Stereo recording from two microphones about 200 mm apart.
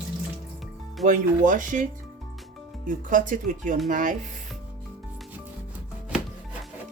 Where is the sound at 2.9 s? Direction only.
40° right (ahead or behind).